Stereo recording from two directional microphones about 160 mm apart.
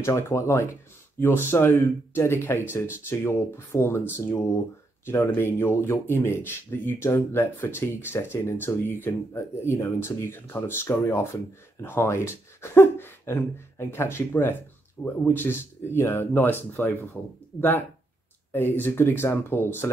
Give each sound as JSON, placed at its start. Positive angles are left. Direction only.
{"t": 0.0, "sound": "speech", "side_deg": 15}